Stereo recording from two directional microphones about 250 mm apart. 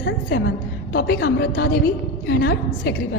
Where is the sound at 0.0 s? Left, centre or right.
Left.